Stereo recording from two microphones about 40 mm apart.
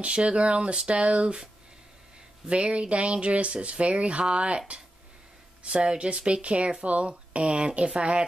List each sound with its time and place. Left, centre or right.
0.0 s speech: right
2.4 s speech: right
5.6 s speech: right